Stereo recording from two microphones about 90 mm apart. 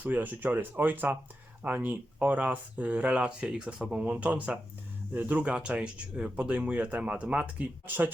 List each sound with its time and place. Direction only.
0.0 s speech: 20° right (ahead or behind)